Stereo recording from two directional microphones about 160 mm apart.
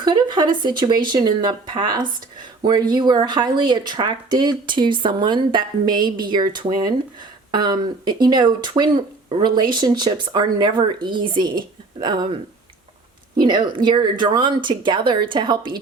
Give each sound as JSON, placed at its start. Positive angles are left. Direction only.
{"t": 0.0, "sound": "speech", "side_deg": -30}
{"t": 13.4, "sound": "speech", "side_deg": -30}